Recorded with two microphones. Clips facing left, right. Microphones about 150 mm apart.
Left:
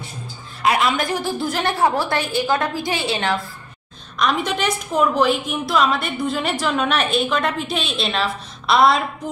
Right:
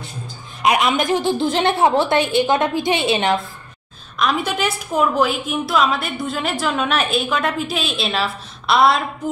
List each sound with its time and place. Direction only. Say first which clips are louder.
0.6 s a woman's voice: right 2 dB; 20° right (ahead or behind)
4.2 s a woman's voice: right 1 dB; 5° right (ahead or behind)